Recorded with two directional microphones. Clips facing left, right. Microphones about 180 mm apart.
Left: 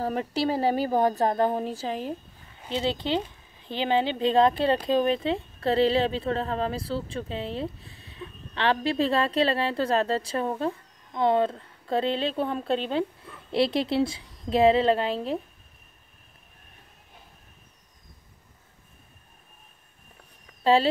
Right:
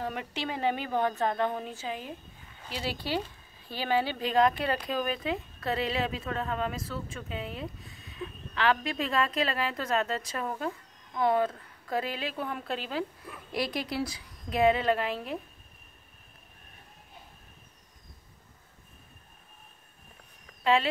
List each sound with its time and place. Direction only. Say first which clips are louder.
0.0 s speech: left 8 dB; 35° left (ahead or behind)
2.6 s a woman's voice: left 7 dB; 25° left (ahead or behind)
20.7 s speech: left 5 dB; 30° left (ahead or behind)